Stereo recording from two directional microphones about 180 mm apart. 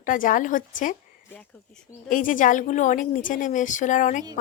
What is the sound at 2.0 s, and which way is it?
Speech, 45° left (ahead or behind).